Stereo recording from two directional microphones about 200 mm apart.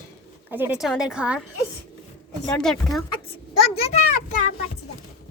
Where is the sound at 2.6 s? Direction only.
Centre (ahead or behind).